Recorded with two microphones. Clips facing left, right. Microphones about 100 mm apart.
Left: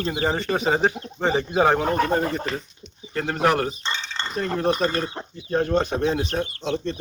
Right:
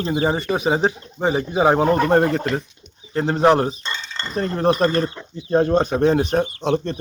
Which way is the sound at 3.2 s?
25° right (ahead or behind).